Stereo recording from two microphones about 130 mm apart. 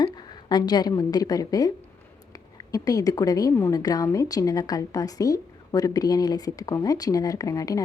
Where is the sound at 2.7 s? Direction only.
25° left (ahead or behind).